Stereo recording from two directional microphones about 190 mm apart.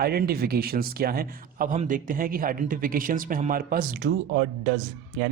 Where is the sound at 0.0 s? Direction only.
55° right (ahead or behind).